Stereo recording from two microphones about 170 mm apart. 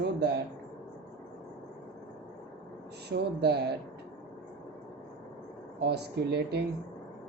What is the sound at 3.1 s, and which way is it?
Speech, 75° right (ahead or behind).